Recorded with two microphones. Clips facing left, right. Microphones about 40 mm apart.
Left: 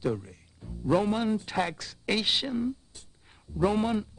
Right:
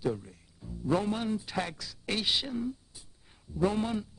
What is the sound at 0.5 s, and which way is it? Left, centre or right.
Speech, centre.